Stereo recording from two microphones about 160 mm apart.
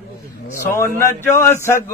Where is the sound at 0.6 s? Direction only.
15° left (ahead or behind).